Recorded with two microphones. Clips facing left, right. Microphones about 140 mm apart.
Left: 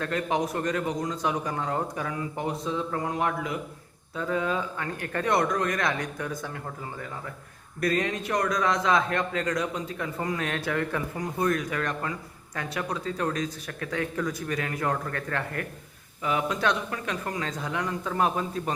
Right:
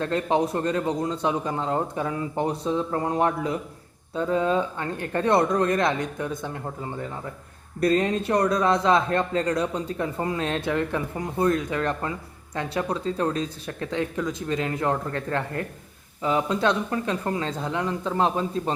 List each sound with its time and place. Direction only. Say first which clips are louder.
0.0 s a man's voice: right 4 dB; 30° right (ahead or behind)